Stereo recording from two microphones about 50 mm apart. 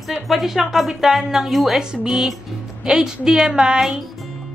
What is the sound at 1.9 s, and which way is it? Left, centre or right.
A woman's voice, centre.